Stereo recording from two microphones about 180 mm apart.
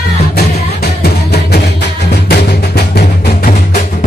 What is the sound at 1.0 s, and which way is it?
Music, 65° left (ahead or behind).